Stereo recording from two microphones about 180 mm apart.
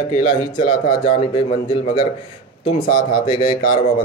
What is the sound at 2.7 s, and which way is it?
Speech, 55° left (ahead or behind).